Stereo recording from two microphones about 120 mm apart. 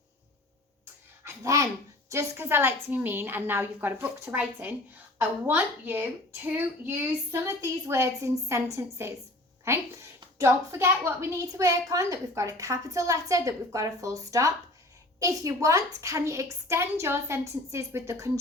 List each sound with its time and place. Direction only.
1.2 s a child's voice: 25° right (ahead or behind)